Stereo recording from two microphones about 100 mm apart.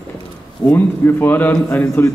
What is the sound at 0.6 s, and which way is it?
A man's voice, 20° left (ahead or behind).